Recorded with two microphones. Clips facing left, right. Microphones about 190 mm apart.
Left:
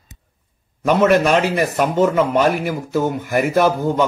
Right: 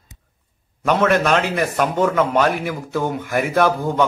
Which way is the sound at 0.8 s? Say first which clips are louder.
Left 3 dB; 5° left (ahead or behind).